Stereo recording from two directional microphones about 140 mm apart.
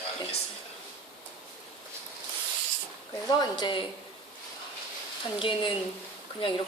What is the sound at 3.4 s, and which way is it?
Speech, 35° left (ahead or behind).